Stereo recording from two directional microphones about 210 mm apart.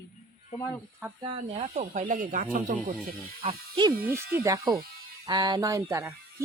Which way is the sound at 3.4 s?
20° right (ahead or behind).